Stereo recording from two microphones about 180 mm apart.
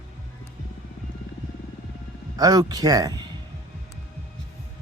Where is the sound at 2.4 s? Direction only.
20° right (ahead or behind).